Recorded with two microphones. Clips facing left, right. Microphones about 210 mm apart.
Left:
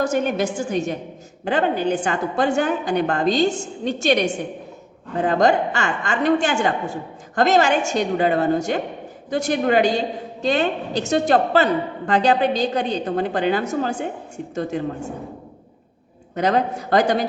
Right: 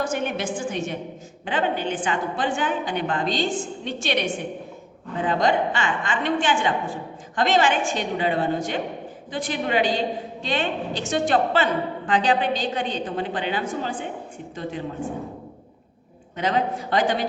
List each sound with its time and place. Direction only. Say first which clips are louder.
0.0 s a woman's voice: left 5 dB; 40° left (ahead or behind)
16.3 s a woman's voice: left 4 dB; 40° left (ahead or behind)